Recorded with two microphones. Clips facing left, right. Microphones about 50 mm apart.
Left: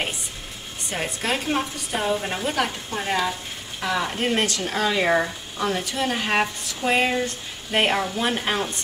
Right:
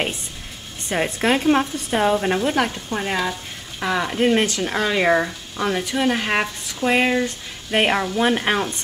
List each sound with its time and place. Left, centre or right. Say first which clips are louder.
0.9 s a woman's voice: right 6 dB; right
2.3 s a woman's voice: right 4 dB; centre